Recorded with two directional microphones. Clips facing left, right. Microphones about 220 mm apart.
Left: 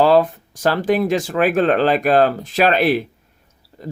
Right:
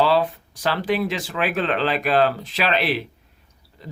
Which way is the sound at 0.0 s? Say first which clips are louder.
Left 5 dB; 45° left (ahead or behind).